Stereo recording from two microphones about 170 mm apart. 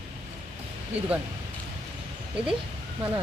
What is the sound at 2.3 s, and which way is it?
Speech, 5° right (ahead or behind).